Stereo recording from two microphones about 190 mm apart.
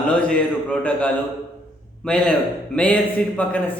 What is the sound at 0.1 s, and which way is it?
A man's voice, 5° left (ahead or behind).